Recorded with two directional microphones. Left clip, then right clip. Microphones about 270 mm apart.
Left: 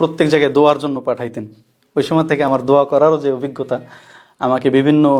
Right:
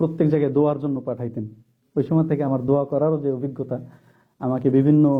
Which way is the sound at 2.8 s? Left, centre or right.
Left.